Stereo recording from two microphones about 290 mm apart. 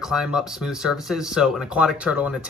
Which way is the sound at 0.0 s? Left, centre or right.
Centre.